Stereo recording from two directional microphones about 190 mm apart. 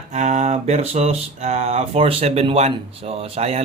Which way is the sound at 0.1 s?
40° right (ahead or behind).